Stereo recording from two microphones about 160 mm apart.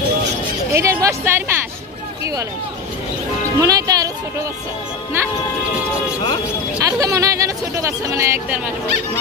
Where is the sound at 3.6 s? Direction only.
20° right (ahead or behind).